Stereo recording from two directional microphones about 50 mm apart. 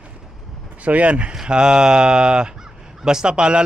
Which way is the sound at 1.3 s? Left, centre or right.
Centre.